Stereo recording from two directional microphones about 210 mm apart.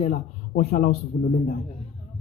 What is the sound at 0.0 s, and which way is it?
A man's voice, 35° left (ahead or behind).